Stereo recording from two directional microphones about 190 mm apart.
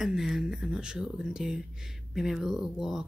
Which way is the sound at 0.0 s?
Centre (ahead or behind).